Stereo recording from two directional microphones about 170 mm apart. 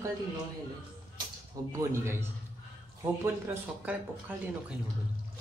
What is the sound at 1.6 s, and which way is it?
Speech, 20° right (ahead or behind).